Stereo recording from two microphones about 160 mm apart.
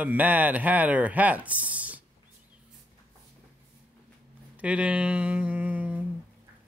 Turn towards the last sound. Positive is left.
turn(degrees=-10)  # may be behind; listen again after turning